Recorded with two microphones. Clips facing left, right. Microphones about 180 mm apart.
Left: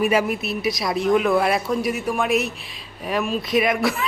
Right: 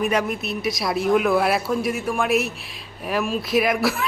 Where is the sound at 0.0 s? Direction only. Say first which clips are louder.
Left 2 dB; 5° left (ahead or behind).